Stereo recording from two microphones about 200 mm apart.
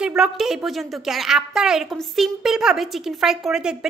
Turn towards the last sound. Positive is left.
turn(degrees=-5)  # may be behind; listen again after turning